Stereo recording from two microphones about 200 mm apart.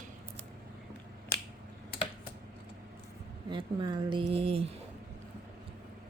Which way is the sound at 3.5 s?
25° right (ahead or behind).